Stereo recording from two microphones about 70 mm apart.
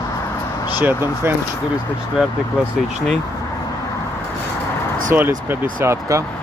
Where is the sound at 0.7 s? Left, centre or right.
Right.